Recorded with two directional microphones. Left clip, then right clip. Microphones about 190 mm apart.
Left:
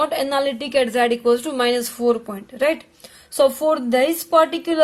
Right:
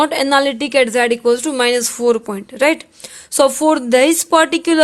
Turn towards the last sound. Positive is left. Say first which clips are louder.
# right 4 dB
turn(degrees=-45)  # may be behind; listen again after turning